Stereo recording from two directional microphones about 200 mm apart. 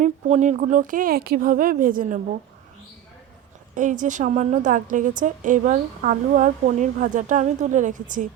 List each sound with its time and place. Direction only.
0.0 s speech: 35° right (ahead or behind)
3.8 s a woman's voice: 40° right (ahead or behind)